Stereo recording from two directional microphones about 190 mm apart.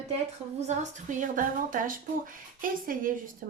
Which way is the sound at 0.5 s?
35° right (ahead or behind).